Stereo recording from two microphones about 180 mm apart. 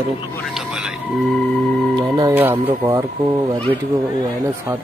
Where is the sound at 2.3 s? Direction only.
10° right (ahead or behind).